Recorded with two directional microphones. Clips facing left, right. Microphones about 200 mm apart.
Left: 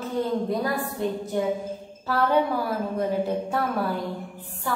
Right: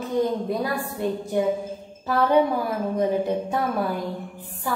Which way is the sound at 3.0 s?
20° right (ahead or behind).